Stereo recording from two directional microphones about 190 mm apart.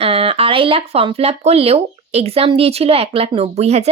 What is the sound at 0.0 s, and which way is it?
Speech, 30° right (ahead or behind).